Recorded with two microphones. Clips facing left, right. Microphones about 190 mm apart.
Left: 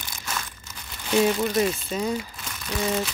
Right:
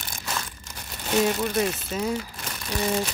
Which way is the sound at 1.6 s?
5° right (ahead or behind).